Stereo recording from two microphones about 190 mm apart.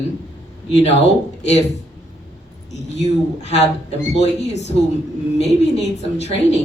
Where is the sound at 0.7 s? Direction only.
35° left (ahead or behind).